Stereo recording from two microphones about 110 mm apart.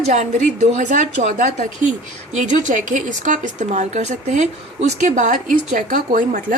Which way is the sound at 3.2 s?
90° right.